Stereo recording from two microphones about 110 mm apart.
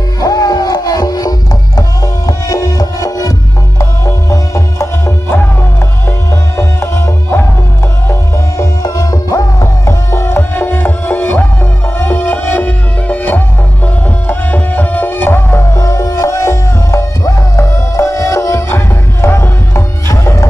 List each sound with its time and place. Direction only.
0.2 s music: 35° left (ahead or behind)
6.5 s music: 25° left (ahead or behind)